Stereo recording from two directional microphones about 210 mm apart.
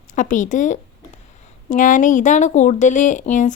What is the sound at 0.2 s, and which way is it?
A woman's voice, 35° left (ahead or behind).